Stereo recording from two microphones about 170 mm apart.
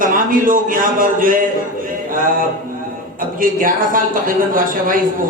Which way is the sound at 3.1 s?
55° right (ahead or behind).